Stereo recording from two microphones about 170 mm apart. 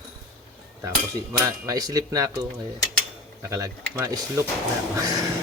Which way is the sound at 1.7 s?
20° right (ahead or behind).